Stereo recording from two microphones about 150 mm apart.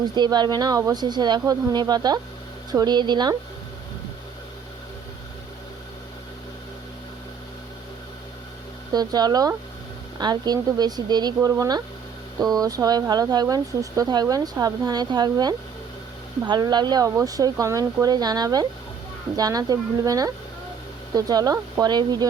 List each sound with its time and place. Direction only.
0.0 s speech: 30° right (ahead or behind)
8.9 s speech: 25° right (ahead or behind)